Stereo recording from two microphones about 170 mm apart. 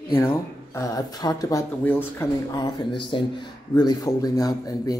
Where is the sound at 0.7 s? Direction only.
20° left (ahead or behind).